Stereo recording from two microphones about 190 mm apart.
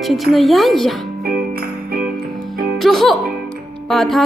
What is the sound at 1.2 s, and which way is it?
Music, 50° right (ahead or behind).